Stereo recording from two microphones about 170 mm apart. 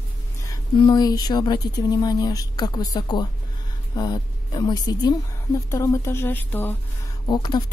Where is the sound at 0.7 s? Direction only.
25° left (ahead or behind).